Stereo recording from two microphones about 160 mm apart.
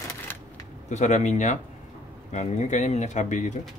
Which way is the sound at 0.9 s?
45° left (ahead or behind).